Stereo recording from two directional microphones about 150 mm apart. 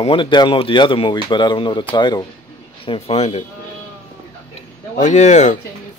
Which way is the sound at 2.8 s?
40° left (ahead or behind).